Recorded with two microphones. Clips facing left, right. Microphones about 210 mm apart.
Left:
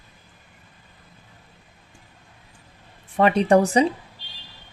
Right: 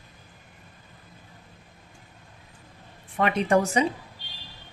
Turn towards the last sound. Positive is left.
turn(degrees=35)  # may be behind; listen again after turning